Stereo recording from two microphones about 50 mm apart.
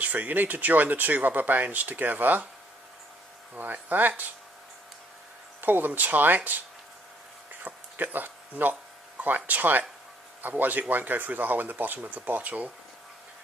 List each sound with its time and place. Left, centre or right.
0.0 s speech: right
3.5 s speech: right
5.6 s speech: right
7.6 s a sound: right
9.2 s speech: right